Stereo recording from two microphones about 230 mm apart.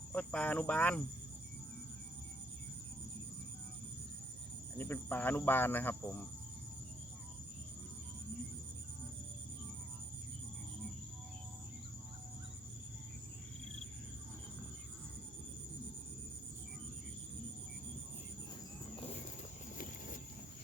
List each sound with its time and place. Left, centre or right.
0.1 s speech: centre
4.8 s speech: centre
18.9 s a sound: left